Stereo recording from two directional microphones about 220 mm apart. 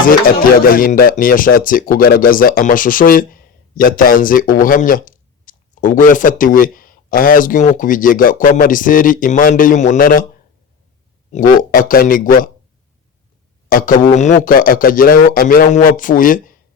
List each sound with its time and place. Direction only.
0.6 s speech: 40° left (ahead or behind)
11.3 s speech: 40° left (ahead or behind)
13.7 s speech: 40° left (ahead or behind)